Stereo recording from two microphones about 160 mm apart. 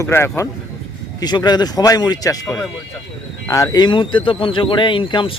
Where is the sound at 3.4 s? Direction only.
20° left (ahead or behind).